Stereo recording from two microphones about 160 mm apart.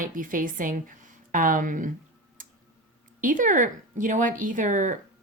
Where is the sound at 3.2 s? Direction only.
55° right (ahead or behind).